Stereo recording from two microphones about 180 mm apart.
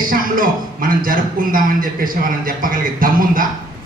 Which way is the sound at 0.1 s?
50° right (ahead or behind).